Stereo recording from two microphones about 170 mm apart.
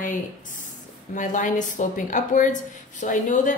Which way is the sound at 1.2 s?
50° left (ahead or behind).